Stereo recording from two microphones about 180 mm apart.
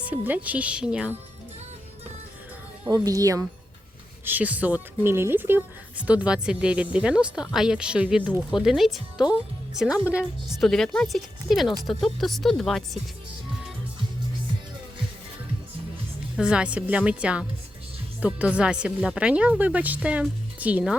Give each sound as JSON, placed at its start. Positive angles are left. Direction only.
{"t": 0.0, "sound": "speech", "side_deg": -10}
{"t": 2.8, "sound": "speech", "side_deg": -20}
{"t": 16.4, "sound": "speech", "side_deg": -5}